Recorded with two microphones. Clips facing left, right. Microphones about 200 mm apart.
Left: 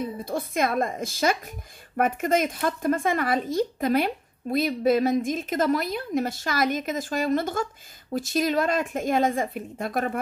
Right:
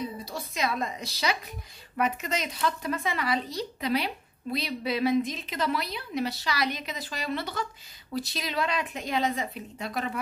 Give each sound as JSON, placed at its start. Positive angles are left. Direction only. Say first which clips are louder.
{"t": 0.0, "sound": "speech", "louder": "left 6 dB", "side_deg": 50}